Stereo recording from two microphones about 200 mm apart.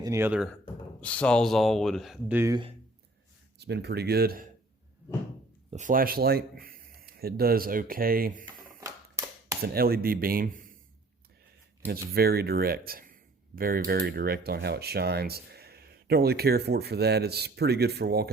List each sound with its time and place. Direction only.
0.0 s speech: 15° right (ahead or behind)
1.0 s speech: 5° left (ahead or behind); by 2.6 s 10° right (ahead or behind)
3.6 s speech: 55° right (ahead or behind)
5.7 s speech: 40° right (ahead or behind)
8.8 s a sound: 15° right (ahead or behind)
9.6 s speech: 50° right (ahead or behind)
11.9 s speech: 50° right (ahead or behind)